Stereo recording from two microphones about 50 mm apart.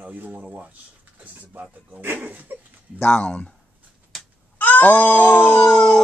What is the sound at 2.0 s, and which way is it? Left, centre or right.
Speech, right.